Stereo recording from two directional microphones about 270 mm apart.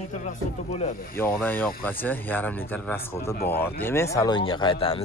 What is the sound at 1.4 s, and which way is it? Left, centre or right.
Speech, centre.